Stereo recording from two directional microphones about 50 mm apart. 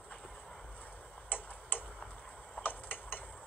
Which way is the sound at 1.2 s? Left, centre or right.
Left.